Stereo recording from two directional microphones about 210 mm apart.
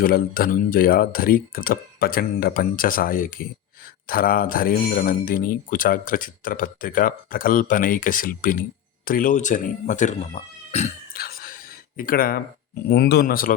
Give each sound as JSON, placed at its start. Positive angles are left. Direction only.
{"t": 0.0, "sound": "speech", "side_deg": 45}
{"t": 11.1, "sound": "a sound", "side_deg": 45}
{"t": 11.9, "sound": "speech", "side_deg": 45}